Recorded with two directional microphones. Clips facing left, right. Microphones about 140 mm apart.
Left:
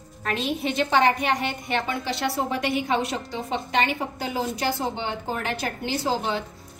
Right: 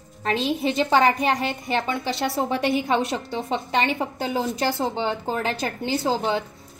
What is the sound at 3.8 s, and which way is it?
A woman's voice, 25° right (ahead or behind).